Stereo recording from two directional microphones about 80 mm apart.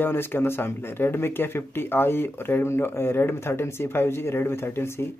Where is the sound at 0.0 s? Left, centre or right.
Left.